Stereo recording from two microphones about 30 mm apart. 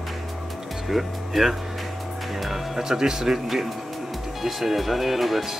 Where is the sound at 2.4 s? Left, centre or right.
Centre.